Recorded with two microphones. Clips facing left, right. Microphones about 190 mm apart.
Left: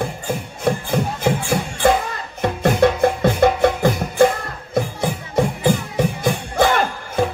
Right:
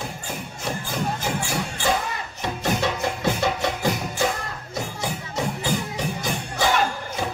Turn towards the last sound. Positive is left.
turn(degrees=55)  # may be behind; listen again after turning